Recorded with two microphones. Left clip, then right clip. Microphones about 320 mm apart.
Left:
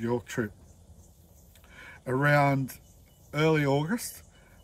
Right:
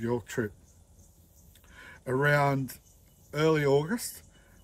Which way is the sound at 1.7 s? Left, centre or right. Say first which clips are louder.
Even; centre.